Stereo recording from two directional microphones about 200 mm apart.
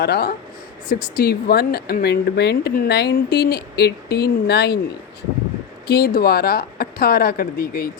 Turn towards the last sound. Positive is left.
turn(degrees=50)  # may be behind; listen again after turning